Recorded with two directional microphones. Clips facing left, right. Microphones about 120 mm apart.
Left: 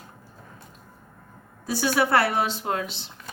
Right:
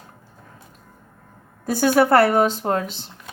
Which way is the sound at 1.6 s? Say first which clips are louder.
Right 7 dB; 50° right (ahead or behind).